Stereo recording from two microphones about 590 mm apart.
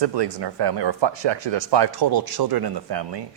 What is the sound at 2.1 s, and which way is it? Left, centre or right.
Speech, right.